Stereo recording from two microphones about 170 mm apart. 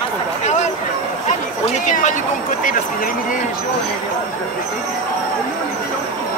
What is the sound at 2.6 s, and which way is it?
Speech, 50° left (ahead or behind).